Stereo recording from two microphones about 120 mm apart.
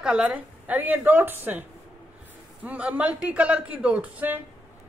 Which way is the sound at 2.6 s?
15° right (ahead or behind).